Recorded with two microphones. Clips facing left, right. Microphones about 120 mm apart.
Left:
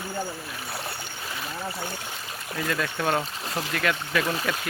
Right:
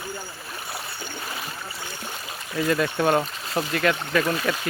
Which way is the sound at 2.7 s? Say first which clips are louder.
Right 5 dB; 5° right (ahead or behind).